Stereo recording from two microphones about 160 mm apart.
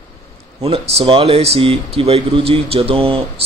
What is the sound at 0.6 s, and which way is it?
Speech, 40° right (ahead or behind).